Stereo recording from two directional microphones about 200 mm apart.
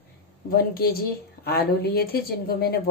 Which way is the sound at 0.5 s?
50° left (ahead or behind).